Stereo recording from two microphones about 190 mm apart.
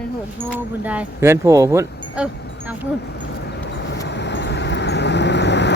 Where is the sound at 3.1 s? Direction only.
65° left (ahead or behind).